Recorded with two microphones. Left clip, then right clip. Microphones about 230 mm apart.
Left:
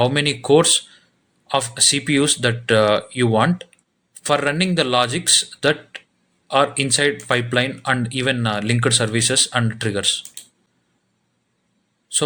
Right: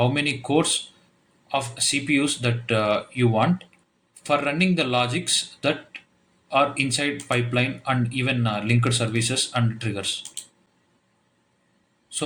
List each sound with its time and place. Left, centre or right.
0.0 s speech: left